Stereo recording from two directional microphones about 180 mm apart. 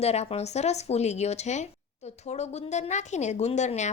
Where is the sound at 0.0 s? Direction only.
35° left (ahead or behind).